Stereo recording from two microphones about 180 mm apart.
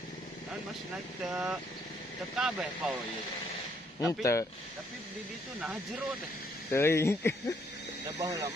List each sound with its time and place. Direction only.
1.3 s speech: 5° right (ahead or behind)
4.0 s speech: 15° left (ahead or behind)
6.7 s speech: 15° left (ahead or behind)
8.2 s speech: 20° right (ahead or behind)